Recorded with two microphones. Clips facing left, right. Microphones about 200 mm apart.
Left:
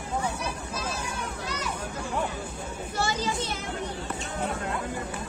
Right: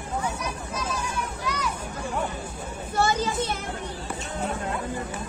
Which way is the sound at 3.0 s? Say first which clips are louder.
Right 5 dB; 50° right (ahead or behind).